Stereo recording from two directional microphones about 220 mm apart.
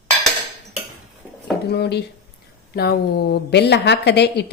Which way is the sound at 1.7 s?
50° left (ahead or behind).